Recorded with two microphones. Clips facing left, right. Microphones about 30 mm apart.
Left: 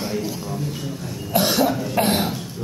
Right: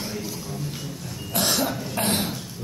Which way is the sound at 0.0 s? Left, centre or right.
Centre.